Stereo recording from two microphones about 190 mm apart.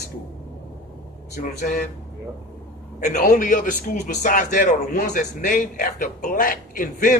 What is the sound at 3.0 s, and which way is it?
A man's voice, 45° left (ahead or behind).